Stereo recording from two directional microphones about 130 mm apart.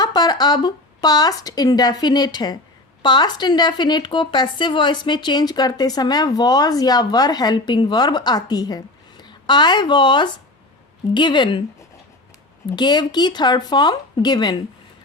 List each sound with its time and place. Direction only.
0.0 s a woman's voice: 30° left (ahead or behind)
12.7 s a woman's voice: 35° left (ahead or behind)